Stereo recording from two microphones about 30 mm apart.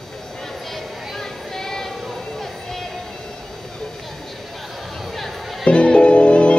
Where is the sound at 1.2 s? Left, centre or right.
Centre.